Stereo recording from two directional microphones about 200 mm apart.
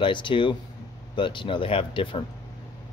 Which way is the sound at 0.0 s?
25° left (ahead or behind).